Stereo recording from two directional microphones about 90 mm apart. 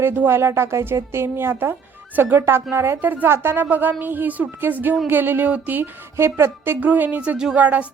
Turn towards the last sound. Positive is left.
turn(degrees=-15)  # may be behind; listen again after turning